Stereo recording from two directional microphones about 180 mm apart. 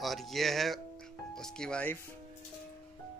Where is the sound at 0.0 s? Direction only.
Centre (ahead or behind).